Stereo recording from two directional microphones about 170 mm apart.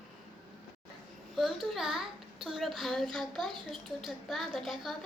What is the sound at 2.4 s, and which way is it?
A woman's voice, centre (ahead or behind).